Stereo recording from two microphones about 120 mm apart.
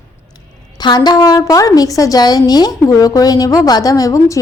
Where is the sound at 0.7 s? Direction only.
35° left (ahead or behind).